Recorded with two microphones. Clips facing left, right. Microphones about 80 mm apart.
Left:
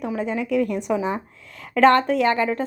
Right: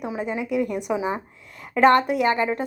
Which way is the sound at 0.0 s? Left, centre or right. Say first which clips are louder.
Left 2 dB; centre.